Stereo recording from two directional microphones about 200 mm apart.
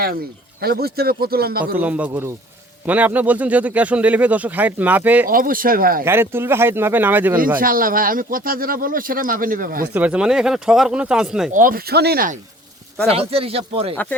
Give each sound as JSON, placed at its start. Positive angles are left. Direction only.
{"t": 0.6, "sound": "speech", "side_deg": -50}
{"t": 1.8, "sound": "speech", "side_deg": -5}
{"t": 5.3, "sound": "speech", "side_deg": -45}
{"t": 6.1, "sound": "speech", "side_deg": -10}
{"t": 7.6, "sound": "speech", "side_deg": -45}
{"t": 9.9, "sound": "speech", "side_deg": -5}
{"t": 11.5, "sound": "speech", "side_deg": -45}
{"t": 13.1, "sound": "speech", "side_deg": -30}
{"t": 13.9, "sound": "speech", "side_deg": 10}